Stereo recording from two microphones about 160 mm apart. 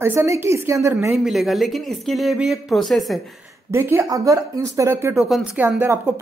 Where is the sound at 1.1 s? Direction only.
Centre (ahead or behind).